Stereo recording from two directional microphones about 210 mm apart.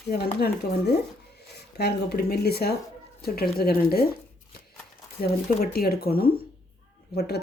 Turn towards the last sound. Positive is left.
turn(degrees=50)  # may be behind; listen again after turning